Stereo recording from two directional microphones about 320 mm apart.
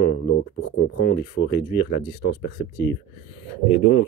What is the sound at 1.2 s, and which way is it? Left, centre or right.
Speech, centre.